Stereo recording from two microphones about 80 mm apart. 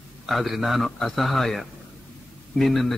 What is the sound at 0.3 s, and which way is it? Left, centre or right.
A man's voice, centre.